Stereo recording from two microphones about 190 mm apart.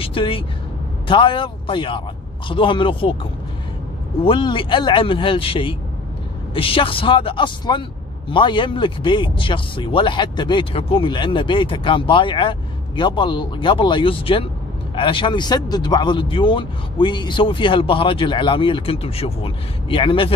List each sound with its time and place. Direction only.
0.0 s vehicle: 30° left (ahead or behind)
1.0 s a man's voice: 25° left (ahead or behind)
4.2 s speech: 25° left (ahead or behind)